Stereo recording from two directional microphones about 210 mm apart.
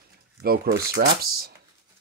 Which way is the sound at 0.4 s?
45° right (ahead or behind).